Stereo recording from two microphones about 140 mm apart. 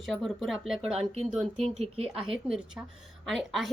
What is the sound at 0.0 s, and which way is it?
Speech, centre (ahead or behind).